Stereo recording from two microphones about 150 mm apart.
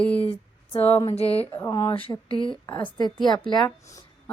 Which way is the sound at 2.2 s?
35° left (ahead or behind).